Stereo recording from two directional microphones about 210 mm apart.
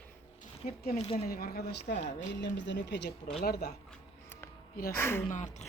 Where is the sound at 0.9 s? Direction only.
30° left (ahead or behind).